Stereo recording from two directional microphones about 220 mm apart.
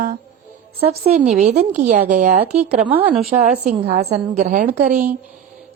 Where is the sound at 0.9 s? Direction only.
35° right (ahead or behind).